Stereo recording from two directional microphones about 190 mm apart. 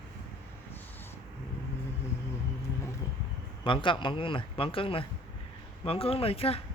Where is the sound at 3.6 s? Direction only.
25° left (ahead or behind).